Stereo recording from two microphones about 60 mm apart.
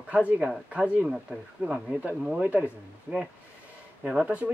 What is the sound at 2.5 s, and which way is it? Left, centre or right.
Speech, right.